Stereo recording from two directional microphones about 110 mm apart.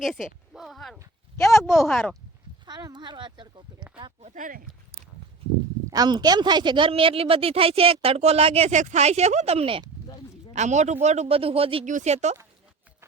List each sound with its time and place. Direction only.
0.0 s a sound: 5° right (ahead or behind)
1.5 s speech: 5° right (ahead or behind)
2.6 s speech: 40° right (ahead or behind)
5.9 s a woman's voice: 40° right (ahead or behind); by 9.8 s 60° right (ahead or behind)
10.5 s speech: 90° right